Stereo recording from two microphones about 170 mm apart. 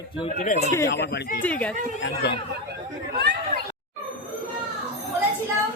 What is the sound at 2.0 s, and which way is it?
Speech, 80° left.